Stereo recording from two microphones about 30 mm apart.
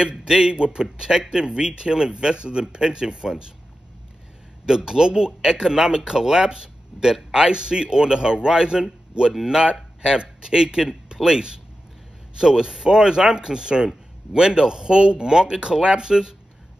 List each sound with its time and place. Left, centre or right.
0.2 s speech: right
1.3 s speech: right
4.6 s a man's voice: right